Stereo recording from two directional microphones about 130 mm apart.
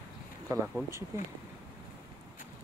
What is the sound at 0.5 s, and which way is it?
Speech, 25° right (ahead or behind).